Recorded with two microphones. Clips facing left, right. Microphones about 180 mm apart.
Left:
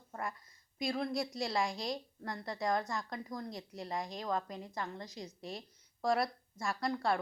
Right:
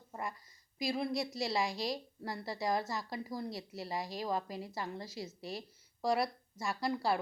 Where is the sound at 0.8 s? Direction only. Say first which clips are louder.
Even; 5° right (ahead or behind).